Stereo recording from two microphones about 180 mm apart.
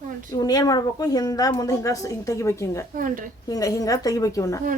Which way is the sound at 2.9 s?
50° right (ahead or behind).